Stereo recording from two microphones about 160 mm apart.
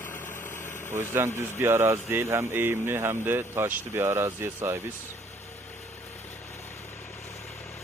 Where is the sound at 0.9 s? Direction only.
15° right (ahead or behind).